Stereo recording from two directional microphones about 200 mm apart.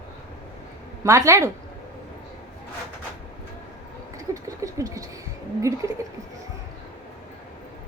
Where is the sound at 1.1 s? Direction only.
15° right (ahead or behind).